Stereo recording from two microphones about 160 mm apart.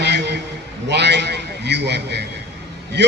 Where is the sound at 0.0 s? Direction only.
90° right.